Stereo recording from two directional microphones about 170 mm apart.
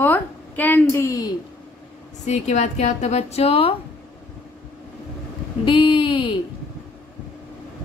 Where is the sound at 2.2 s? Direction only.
45° left (ahead or behind).